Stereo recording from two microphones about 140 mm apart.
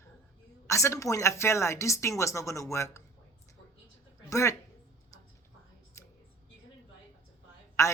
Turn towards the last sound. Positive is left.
turn(degrees=20)  # may be behind; listen again after turning